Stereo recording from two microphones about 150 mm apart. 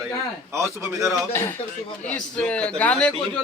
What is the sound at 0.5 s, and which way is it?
Speech, 20° right (ahead or behind).